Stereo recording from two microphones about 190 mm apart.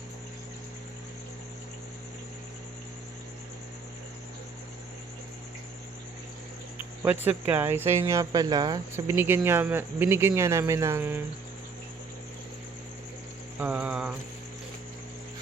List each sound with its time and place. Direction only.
7.3 s speech: 10° right (ahead or behind)
13.6 s speech: 10° right (ahead or behind)